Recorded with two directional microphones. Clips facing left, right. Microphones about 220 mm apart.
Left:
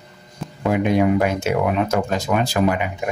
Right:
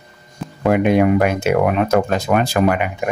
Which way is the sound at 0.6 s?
60° right (ahead or behind).